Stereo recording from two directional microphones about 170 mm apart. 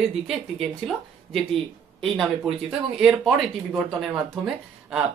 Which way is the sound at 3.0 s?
Centre (ahead or behind).